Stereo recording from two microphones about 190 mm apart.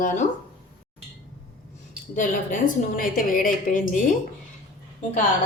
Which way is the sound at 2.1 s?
45° left (ahead or behind).